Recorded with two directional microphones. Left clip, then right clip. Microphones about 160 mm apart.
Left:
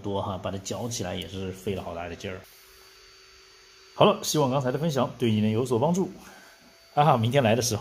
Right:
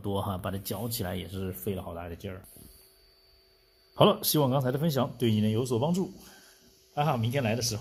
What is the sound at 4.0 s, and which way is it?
Speech, 20° right (ahead or behind).